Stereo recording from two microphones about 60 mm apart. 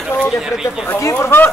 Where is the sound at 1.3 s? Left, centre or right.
Left.